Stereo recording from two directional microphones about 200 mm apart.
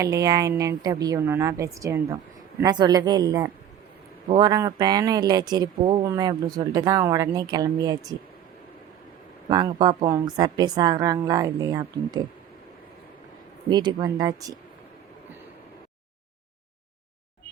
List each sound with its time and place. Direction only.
0.0 s a woman's voice: 15° right (ahead or behind)
9.5 s a woman's voice: 20° right (ahead or behind)
13.7 s a woman's voice: 20° right (ahead or behind)